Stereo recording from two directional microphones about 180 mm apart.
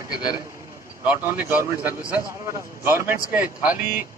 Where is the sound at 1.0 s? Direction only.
10° right (ahead or behind).